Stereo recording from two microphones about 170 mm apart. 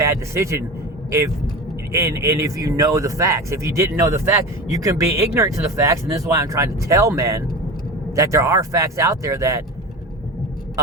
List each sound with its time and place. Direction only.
0.0 s a man's voice: 15° right (ahead or behind)
1.9 s speech: 20° right (ahead or behind)